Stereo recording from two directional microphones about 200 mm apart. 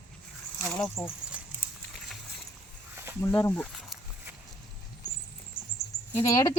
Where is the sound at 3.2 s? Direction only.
15° left (ahead or behind).